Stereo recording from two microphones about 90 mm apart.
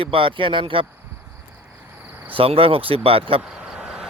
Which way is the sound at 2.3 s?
90° right.